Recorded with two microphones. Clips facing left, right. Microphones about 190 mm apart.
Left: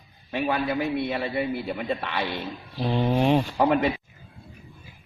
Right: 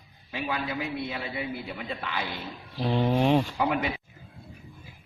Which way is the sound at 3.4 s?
45° left (ahead or behind).